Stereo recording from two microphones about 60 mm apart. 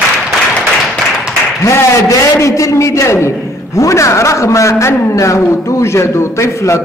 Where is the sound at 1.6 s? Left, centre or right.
Left.